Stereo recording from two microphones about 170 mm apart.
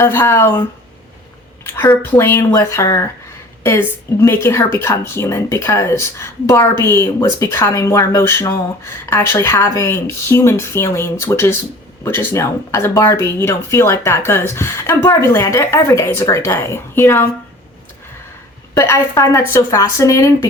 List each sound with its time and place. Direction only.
0.0 s a woman's voice: 15° left (ahead or behind)
1.6 s a woman's voice: 15° left (ahead or behind)
18.7 s a woman's voice: 20° left (ahead or behind)